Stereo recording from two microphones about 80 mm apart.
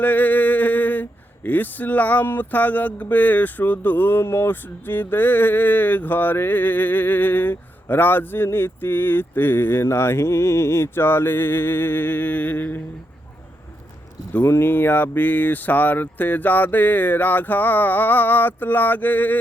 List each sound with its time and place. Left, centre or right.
0.0 s a sound: left
1.5 s speech: left
14.4 s speech: left